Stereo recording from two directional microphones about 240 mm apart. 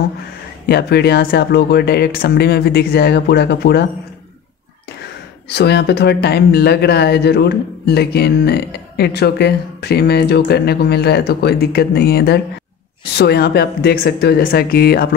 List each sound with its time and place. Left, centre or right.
0.7 s speech: left
5.5 s speech: left